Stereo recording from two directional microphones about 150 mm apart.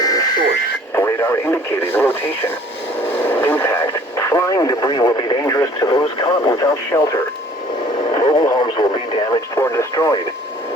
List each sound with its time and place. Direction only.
0.0 s a sound: 25° left (ahead or behind)
0.9 s radio: 20° left (ahead or behind)
3.2 s radio: 10° left (ahead or behind)